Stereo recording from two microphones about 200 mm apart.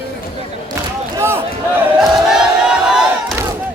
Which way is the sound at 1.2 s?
10° right (ahead or behind).